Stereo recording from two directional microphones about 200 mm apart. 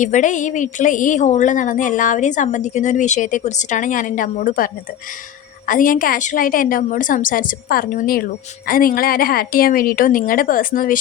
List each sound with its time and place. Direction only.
0.0 s a woman's voice: 40° left (ahead or behind)